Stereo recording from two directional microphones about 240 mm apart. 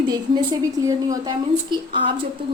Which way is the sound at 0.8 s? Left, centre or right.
Centre.